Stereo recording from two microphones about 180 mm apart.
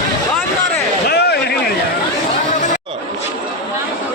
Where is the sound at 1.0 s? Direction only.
65° left (ahead or behind).